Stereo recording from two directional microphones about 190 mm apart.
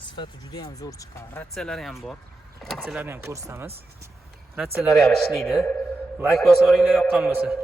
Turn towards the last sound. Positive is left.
turn(degrees=0)  # may be behind; listen again after turning